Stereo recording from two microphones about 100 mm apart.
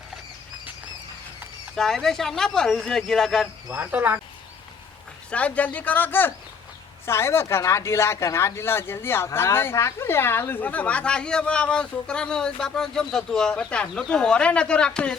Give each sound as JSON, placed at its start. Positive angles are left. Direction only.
{"t": 1.7, "sound": "speech", "side_deg": 5}
{"t": 3.7, "sound": "speech", "side_deg": -15}
{"t": 5.3, "sound": "speech", "side_deg": 15}